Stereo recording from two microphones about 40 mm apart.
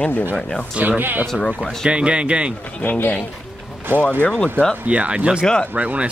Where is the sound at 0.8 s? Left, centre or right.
Right.